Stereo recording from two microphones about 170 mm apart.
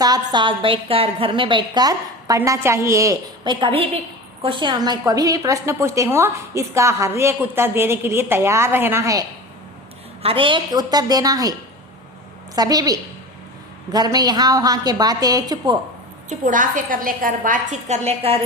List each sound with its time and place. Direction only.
0.0 s a woman's voice: 25° right (ahead or behind)
10.2 s a woman's voice: 30° right (ahead or behind)
12.5 s a woman's voice: 20° right (ahead or behind)
16.3 s a woman's voice: 50° right (ahead or behind)